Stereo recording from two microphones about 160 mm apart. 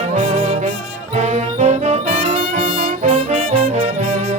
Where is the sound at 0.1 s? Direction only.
45° right (ahead or behind).